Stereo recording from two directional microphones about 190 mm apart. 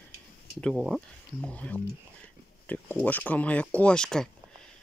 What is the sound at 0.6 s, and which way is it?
Speech, centre (ahead or behind).